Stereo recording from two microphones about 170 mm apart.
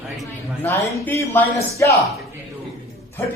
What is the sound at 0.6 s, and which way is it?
A man's voice, 15° left (ahead or behind).